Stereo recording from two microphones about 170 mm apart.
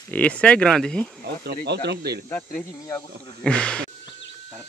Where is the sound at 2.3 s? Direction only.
10° left (ahead or behind).